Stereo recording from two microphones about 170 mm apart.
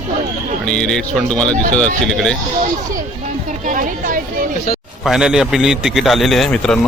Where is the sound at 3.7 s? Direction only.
50° right (ahead or behind).